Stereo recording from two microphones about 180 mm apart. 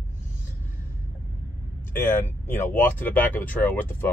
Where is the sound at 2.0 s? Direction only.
10° left (ahead or behind).